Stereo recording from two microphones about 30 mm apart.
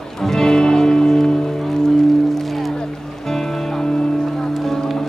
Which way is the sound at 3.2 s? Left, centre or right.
Centre.